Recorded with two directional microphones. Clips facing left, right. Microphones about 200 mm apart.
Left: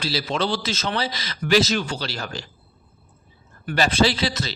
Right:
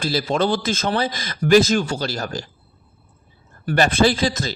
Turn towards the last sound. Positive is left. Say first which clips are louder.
# right 4 dB
turn(degrees=-45)  # may be behind; listen again after turning